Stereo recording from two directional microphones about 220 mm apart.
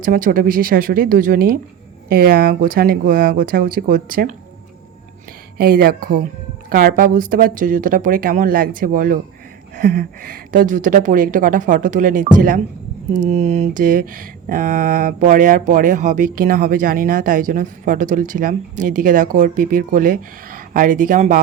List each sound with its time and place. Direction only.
0.0 s speech: 40° right (ahead or behind)
5.5 s speech: 45° right (ahead or behind)